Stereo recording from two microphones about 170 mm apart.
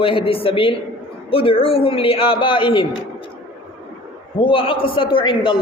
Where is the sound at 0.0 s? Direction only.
30° left (ahead or behind).